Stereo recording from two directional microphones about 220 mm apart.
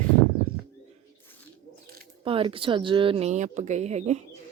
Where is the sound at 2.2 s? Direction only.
25° right (ahead or behind).